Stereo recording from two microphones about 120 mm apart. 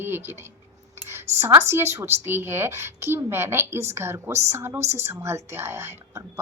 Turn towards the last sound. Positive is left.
turn(degrees=-20)  # may be behind; listen again after turning